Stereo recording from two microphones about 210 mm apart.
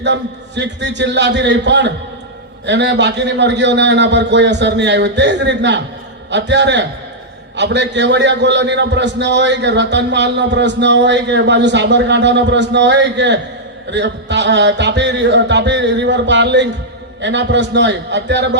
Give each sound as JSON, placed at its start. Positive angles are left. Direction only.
{"t": 0.0, "sound": "a man's voice", "side_deg": -60}